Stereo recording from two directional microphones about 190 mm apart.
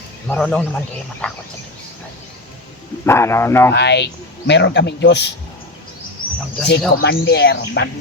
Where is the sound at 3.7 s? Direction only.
65° left (ahead or behind).